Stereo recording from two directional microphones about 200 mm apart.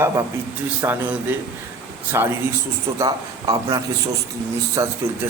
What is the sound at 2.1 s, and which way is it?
A man's voice, 15° right (ahead or behind).